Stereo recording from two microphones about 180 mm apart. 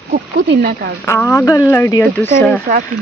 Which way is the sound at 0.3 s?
70° right (ahead or behind).